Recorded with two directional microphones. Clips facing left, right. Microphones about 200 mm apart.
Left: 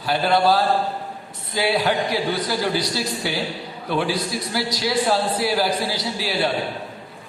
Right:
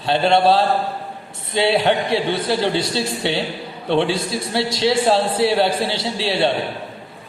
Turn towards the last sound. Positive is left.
turn(degrees=-25)  # may be behind; listen again after turning